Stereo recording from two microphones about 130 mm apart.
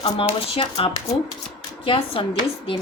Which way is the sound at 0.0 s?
45° left (ahead or behind).